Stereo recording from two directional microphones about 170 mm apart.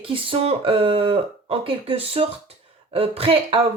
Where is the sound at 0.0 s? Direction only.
30° right (ahead or behind).